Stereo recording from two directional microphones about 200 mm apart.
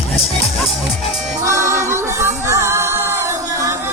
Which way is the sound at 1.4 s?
15° right (ahead or behind).